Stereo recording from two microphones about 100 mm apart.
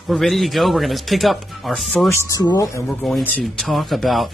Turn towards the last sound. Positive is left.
turn(degrees=0)  # may be behind; listen again after turning